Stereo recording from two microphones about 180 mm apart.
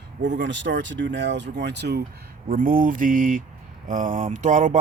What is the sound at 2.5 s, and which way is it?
Speech, 50° right (ahead or behind).